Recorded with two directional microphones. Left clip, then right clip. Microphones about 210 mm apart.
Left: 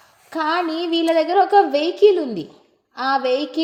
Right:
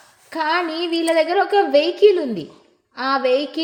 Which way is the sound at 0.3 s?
25° left (ahead or behind).